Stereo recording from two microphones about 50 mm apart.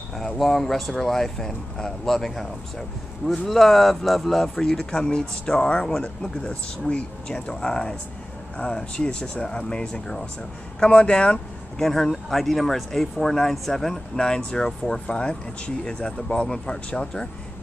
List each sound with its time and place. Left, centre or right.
0.2 s speech: centre; by 11.3 s left
11.8 s speech: centre